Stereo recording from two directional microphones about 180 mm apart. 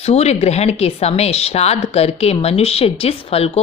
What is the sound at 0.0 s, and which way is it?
Speech, 35° left (ahead or behind).